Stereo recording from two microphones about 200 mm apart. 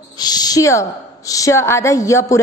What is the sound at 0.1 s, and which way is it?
A woman's voice, 20° left (ahead or behind).